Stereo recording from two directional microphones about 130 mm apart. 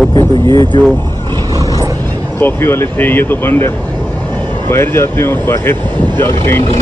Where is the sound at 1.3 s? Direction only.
30° right (ahead or behind).